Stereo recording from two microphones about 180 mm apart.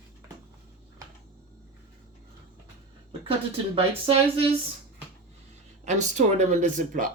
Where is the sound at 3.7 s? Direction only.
30° right (ahead or behind).